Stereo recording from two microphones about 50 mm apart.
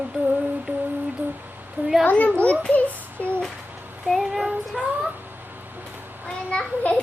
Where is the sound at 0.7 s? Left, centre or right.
Right.